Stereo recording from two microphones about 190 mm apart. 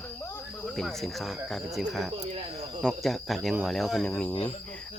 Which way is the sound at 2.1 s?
30° right (ahead or behind).